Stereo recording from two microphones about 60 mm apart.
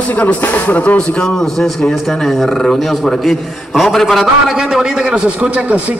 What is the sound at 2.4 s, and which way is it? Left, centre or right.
Speech, centre.